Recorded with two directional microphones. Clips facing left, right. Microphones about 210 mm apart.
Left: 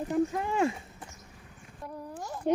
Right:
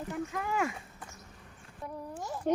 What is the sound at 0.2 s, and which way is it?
Speech, 30° left (ahead or behind).